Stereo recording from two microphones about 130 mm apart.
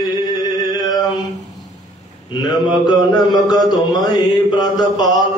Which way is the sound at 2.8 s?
30° left (ahead or behind).